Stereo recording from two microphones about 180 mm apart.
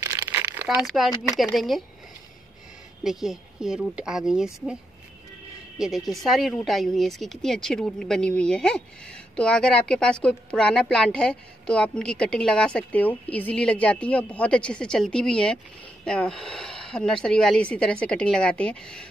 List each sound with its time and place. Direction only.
0.0 s crumpling: 15° right (ahead or behind)
0.8 s a woman's voice: centre (ahead or behind)
3.0 s a woman's voice: centre (ahead or behind)
5.8 s a woman's voice: centre (ahead or behind)